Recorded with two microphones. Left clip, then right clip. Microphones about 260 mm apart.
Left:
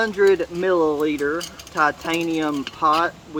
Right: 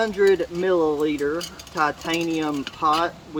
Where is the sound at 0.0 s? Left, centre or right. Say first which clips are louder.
Left 2 dB; centre.